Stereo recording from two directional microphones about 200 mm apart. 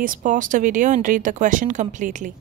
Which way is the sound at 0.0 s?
40° right (ahead or behind).